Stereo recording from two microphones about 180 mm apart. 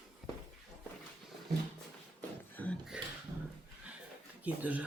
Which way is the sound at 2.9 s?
5° right (ahead or behind).